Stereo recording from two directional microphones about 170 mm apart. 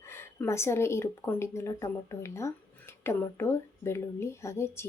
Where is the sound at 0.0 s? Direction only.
15° left (ahead or behind).